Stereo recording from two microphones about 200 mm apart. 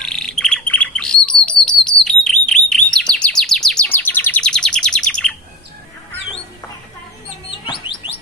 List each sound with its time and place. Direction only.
0.0 s bird: centre (ahead or behind)
7.7 s bird: 25° left (ahead or behind)